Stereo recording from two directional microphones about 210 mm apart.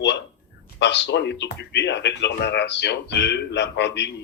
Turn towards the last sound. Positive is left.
turn(degrees=55)  # may be behind; listen again after turning